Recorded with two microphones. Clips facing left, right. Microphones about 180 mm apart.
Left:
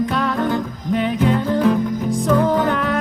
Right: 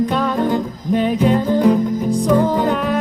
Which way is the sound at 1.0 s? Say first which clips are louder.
Right 3 dB; 20° right (ahead or behind).